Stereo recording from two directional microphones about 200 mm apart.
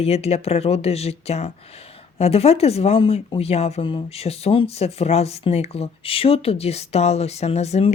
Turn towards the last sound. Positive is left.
turn(degrees=30)  # may be behind; listen again after turning